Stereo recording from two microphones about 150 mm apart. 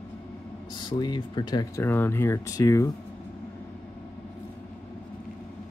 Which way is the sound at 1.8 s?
15° left (ahead or behind).